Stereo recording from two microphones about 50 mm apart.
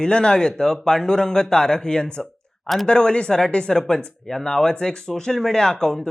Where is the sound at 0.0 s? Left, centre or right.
Centre.